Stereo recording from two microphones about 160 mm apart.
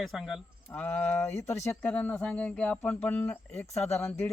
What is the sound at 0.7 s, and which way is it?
Speech, 10° left (ahead or behind).